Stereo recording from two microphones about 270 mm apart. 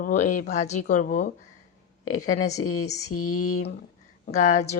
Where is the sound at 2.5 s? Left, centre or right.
Left.